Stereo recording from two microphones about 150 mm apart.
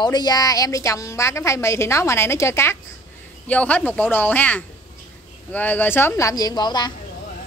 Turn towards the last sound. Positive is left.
turn(degrees=30)  # may be behind; listen again after turning